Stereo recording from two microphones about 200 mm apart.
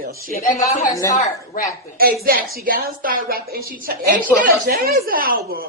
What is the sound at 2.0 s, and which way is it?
A woman's voice, 50° right (ahead or behind).